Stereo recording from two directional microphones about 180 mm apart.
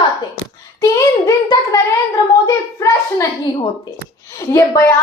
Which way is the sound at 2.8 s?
15° left (ahead or behind).